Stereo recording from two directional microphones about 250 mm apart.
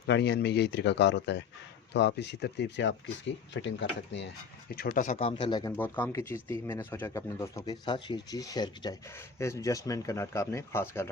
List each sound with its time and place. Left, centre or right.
0.1 s speech: left; by 5.7 s centre
5.7 s speech: centre